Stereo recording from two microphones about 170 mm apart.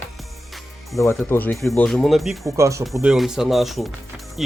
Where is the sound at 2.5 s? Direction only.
20° right (ahead or behind).